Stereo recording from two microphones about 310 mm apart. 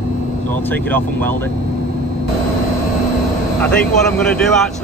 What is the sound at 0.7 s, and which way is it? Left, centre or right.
Speech, centre.